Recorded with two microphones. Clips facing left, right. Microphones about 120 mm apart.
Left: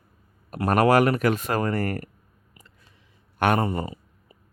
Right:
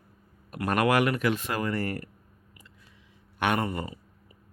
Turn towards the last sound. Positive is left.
turn(degrees=25)  # may be behind; listen again after turning